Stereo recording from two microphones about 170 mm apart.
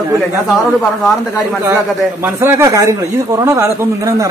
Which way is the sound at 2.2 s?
15° right (ahead or behind).